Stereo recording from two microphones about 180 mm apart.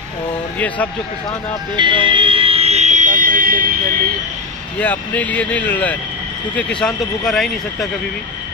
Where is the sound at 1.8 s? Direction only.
25° right (ahead or behind); by 3.6 s 50° right (ahead or behind).